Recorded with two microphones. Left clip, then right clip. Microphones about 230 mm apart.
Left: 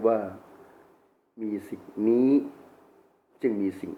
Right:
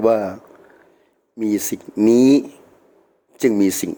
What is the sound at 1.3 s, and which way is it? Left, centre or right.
A man's voice, right.